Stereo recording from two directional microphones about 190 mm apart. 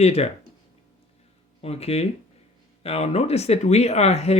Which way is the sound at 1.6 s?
35° left (ahead or behind).